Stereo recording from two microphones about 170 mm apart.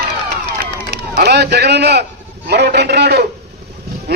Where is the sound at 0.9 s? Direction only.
70° right (ahead or behind).